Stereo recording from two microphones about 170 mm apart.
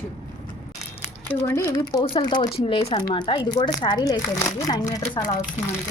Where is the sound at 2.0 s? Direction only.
25° left (ahead or behind).